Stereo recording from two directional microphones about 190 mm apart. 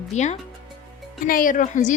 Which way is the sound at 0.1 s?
40° left (ahead or behind).